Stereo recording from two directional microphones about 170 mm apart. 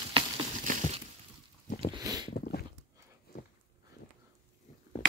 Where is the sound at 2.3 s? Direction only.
55° left (ahead or behind).